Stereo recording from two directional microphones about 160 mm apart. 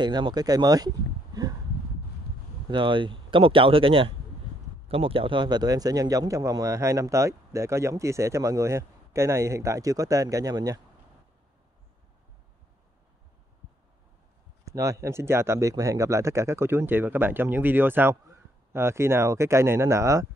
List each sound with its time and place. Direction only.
0.0 s speech: 25° right (ahead or behind)
2.7 s speech: 30° right (ahead or behind)
14.6 s speech: 20° right (ahead or behind)